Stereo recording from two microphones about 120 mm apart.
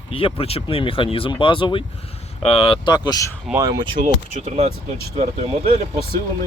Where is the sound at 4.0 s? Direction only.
65° right (ahead or behind).